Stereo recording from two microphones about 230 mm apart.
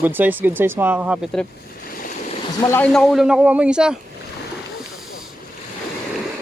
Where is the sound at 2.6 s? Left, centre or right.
Centre.